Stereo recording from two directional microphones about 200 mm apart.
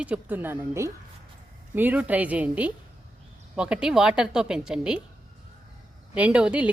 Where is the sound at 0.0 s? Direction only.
10° right (ahead or behind).